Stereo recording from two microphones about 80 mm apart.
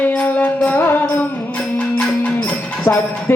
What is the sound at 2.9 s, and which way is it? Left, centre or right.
Music, left.